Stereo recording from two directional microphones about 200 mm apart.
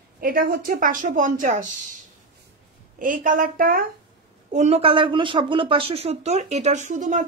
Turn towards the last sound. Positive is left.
turn(degrees=-40)  # may be behind; listen again after turning